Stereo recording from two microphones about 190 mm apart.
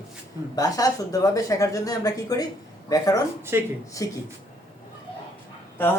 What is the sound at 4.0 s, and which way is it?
Speech, 15° left (ahead or behind).